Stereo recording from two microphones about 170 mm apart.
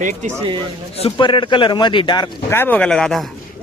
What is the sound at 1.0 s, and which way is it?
A man's voice, 30° left (ahead or behind).